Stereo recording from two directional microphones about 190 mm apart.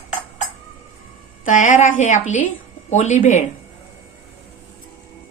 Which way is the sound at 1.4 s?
45° left (ahead or behind).